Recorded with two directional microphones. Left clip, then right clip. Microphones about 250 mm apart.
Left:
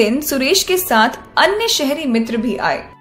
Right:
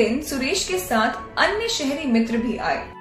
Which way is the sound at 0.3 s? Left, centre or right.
Left.